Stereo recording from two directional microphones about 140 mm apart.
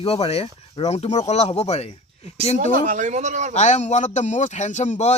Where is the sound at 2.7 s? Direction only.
70° right (ahead or behind).